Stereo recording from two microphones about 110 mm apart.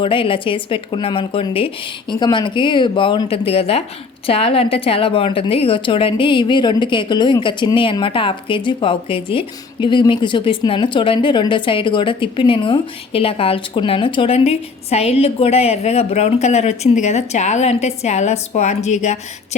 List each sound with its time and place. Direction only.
0.0 s a woman's voice: 50° left (ahead or behind)
14.3 s a woman's voice: 70° left (ahead or behind); by 19.2 s 90° left